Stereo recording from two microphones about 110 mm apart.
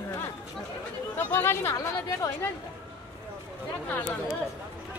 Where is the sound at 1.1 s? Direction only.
20° left (ahead or behind).